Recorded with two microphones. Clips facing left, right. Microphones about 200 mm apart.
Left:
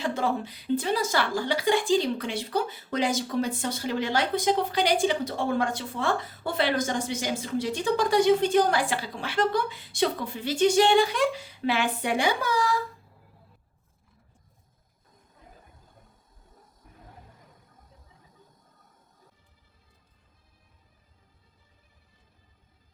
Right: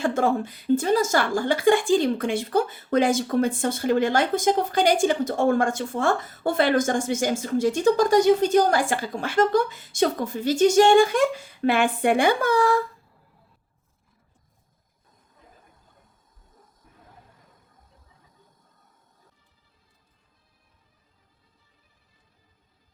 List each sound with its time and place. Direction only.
0.0 s a woman's voice: 50° right (ahead or behind)